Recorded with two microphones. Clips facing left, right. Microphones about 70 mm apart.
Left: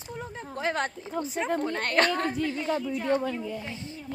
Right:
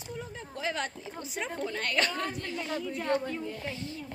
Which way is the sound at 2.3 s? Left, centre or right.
Left.